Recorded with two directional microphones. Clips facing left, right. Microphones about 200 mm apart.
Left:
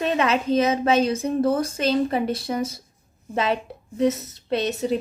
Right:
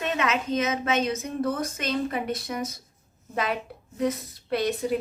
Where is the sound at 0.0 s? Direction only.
35° left (ahead or behind).